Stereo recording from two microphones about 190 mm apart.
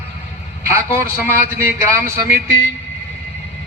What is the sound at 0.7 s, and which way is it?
A man's voice, 10° right (ahead or behind).